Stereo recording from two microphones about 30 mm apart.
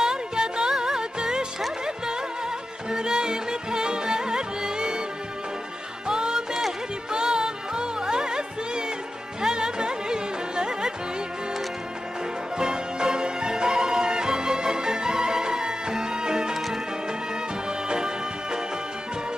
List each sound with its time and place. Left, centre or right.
0.0 s music: right
2.9 s music: right
6.1 s music: right
6.5 s music: centre
7.1 s music: right
12.5 s music: right
17.7 s music: right